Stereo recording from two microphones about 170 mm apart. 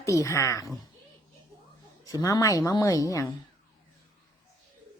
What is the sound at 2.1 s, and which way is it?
A woman's voice, 20° left (ahead or behind).